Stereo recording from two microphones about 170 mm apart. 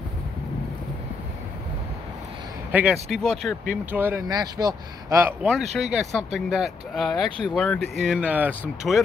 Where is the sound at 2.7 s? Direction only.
10° right (ahead or behind).